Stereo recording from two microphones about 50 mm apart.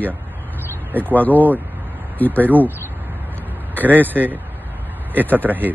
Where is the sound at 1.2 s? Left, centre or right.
Left.